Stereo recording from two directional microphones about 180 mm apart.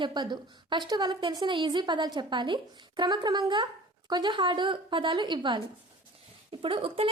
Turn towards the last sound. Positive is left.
turn(degrees=-30)  # may be behind; listen again after turning